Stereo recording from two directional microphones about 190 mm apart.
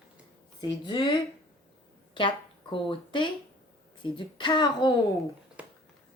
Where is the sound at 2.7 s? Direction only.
25° left (ahead or behind).